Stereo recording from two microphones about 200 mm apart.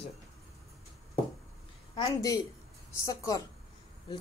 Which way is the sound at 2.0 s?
20° left (ahead or behind).